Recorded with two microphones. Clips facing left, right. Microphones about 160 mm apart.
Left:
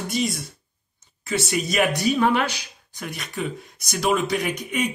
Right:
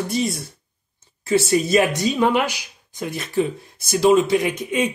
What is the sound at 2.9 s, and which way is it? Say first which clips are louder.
Speech: right 8 dB; 25° right (ahead or behind).